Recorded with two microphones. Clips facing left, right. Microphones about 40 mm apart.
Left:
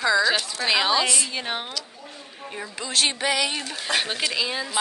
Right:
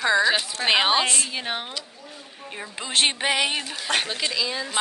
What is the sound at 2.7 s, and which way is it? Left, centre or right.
A woman's voice, right.